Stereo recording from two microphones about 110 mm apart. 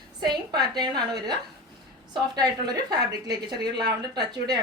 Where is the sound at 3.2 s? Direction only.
35° right (ahead or behind).